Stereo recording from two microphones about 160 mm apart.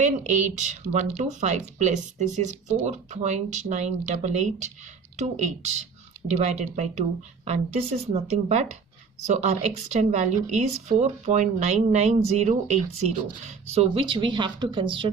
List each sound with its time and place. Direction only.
0.0 s speech: 50° right (ahead or behind)
6.2 s speech: 45° right (ahead or behind)